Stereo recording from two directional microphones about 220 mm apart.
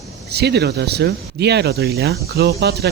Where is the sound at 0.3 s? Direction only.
50° right (ahead or behind).